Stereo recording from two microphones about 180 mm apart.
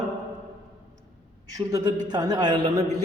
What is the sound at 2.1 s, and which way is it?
Speech, 20° right (ahead or behind).